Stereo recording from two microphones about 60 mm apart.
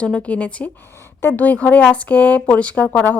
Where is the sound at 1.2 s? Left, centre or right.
Left.